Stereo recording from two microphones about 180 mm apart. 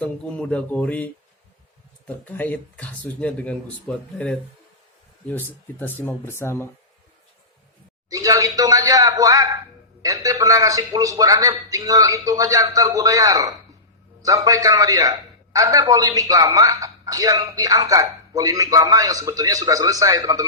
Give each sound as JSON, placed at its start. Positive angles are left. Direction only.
{"t": 0.0, "sound": "speech", "side_deg": 5}
{"t": 8.1, "sound": "a man's voice", "side_deg": -20}